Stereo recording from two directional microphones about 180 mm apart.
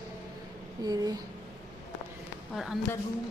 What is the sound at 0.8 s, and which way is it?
Speech, 20° right (ahead or behind).